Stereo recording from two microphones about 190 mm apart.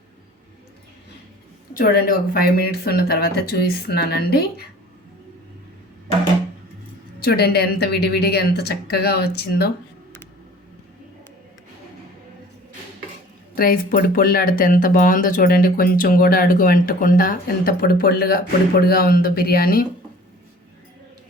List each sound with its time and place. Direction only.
1.8 s speech: 50° left (ahead or behind)
7.2 s speech: 55° left (ahead or behind)
13.6 s speech: 50° left (ahead or behind)